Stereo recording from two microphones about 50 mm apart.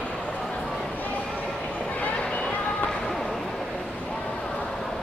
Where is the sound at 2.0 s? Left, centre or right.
Left.